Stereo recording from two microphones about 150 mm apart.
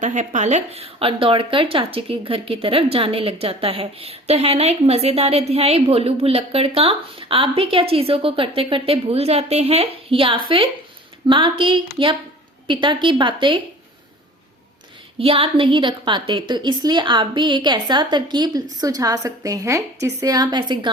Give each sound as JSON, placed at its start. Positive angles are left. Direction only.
{"t": 0.0, "sound": "speech", "side_deg": -55}
{"t": 15.2, "sound": "a woman's voice", "side_deg": -35}